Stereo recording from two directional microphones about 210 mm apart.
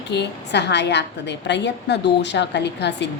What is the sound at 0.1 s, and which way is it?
A woman's voice, 55° left (ahead or behind).